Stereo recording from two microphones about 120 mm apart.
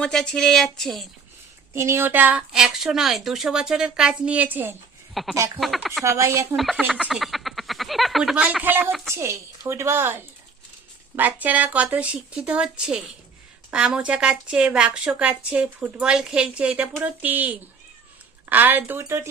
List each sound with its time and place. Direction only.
0.0 s speech: 5° left (ahead or behind)
1.7 s a woman's voice: 20° right (ahead or behind)
2.5 s speech: 5° right (ahead or behind)
6.1 s a woman's voice: 25° right (ahead or behind)
6.6 s speech: centre (ahead or behind)
9.1 s a woman's voice: 25° right (ahead or behind)